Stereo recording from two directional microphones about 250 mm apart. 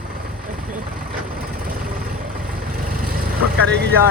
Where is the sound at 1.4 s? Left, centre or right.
Right.